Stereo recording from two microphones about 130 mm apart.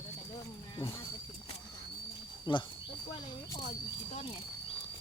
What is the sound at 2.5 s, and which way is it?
Speech, 35° left (ahead or behind).